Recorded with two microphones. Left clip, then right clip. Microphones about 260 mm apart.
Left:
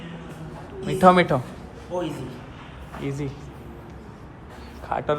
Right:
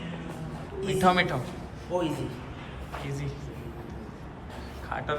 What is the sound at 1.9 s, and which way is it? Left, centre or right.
Speech, centre.